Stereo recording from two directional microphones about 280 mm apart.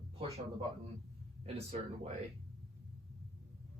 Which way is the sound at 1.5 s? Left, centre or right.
Right.